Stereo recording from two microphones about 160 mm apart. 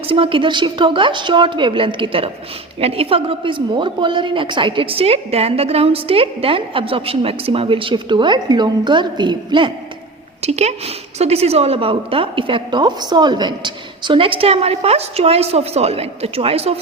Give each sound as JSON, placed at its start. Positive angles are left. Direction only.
{"t": 0.1, "sound": "a woman's voice", "side_deg": -35}
{"t": 10.4, "sound": "a woman's voice", "side_deg": -45}